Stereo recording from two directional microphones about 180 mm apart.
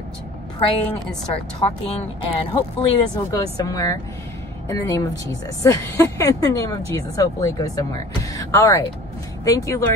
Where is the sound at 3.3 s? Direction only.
20° left (ahead or behind).